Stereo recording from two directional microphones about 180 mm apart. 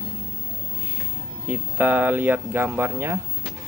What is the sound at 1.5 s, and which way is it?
Speech, 10° right (ahead or behind).